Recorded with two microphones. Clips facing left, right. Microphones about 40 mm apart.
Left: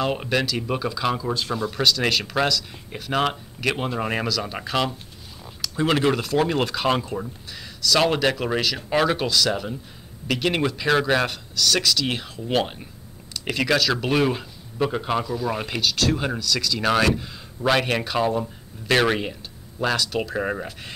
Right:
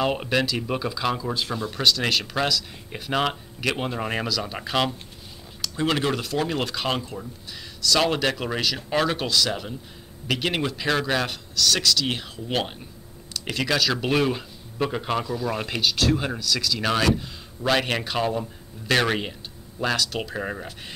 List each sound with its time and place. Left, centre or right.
0.0 s a man's voice: centre
10.2 s speech: centre
10.9 s a man's voice: centre
13.3 s a sound: centre
13.7 s a man's voice: centre
20.3 s speech: centre